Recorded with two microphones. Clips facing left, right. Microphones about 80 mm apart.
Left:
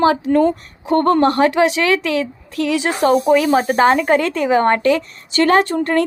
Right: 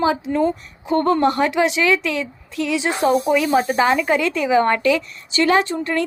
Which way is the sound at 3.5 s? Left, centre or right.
Left.